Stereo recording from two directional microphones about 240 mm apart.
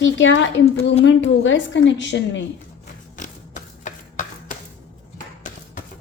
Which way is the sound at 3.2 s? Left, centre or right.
Left.